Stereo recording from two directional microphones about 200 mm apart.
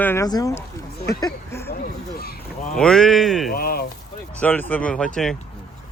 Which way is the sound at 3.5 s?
50° left (ahead or behind).